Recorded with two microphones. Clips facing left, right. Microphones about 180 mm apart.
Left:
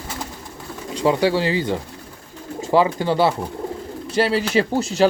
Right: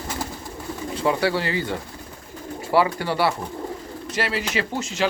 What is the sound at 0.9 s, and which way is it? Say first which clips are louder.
Speech: left 4 dB; 20° left (ahead or behind).